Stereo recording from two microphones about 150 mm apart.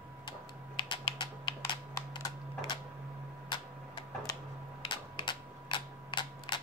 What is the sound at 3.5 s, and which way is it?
Typewriter, 25° left (ahead or behind).